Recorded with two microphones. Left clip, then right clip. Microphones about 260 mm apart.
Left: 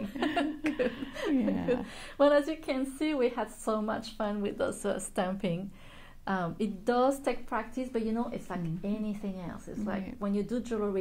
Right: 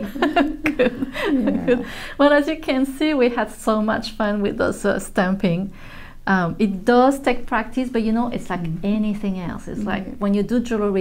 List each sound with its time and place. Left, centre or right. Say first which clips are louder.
0.0 s a woman's voice: right 12 dB; right